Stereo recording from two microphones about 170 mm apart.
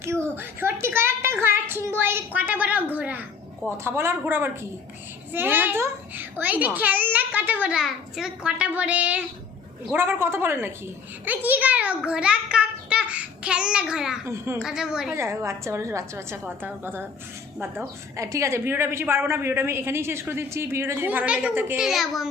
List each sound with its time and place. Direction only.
0.3 s a woman's voice: 15° right (ahead or behind)
14.3 s a woman's voice: 15° right (ahead or behind)
14.6 s a child's voice: 5° right (ahead or behind)
15.1 s a woman's voice: 15° right (ahead or behind)